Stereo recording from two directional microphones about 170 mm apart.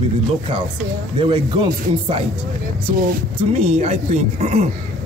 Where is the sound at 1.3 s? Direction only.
30° right (ahead or behind).